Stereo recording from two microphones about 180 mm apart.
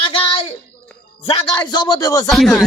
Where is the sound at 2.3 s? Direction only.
Centre (ahead or behind).